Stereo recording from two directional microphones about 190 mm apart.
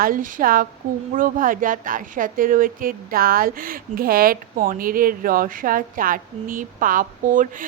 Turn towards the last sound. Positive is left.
turn(degrees=-45)  # may be behind; listen again after turning